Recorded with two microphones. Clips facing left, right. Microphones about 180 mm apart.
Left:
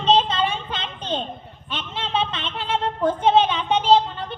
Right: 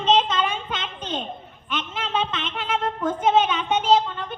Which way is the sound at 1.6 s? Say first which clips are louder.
Right 1 dB; 30° left (ahead or behind).